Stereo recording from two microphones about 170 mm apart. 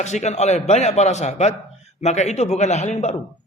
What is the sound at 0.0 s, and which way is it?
A man's voice, 40° left (ahead or behind).